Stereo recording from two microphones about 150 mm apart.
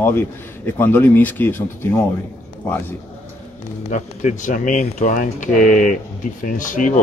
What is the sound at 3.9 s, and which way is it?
Speech, 55° left (ahead or behind).